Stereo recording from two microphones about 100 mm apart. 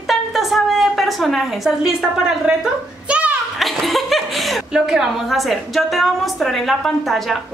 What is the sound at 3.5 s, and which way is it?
A woman's voice, centre (ahead or behind).